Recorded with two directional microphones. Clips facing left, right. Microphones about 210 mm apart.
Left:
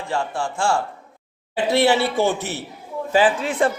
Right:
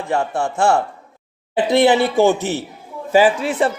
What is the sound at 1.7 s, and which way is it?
Speech, 20° right (ahead or behind).